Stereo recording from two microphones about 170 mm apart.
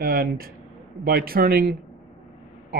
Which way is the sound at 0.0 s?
60° right (ahead or behind).